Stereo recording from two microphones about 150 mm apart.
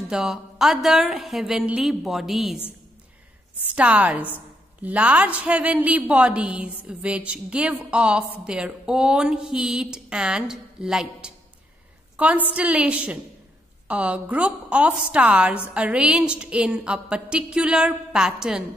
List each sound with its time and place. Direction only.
0.1 s a woman's voice: 5° right (ahead or behind)
3.7 s speech: 10° right (ahead or behind)